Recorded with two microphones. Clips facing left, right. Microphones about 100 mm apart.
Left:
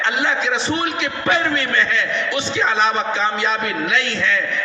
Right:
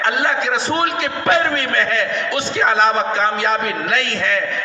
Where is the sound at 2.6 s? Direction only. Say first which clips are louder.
Right 3 dB; 45° right (ahead or behind).